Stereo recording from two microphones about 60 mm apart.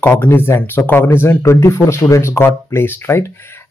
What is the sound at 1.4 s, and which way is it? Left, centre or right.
Speech, left.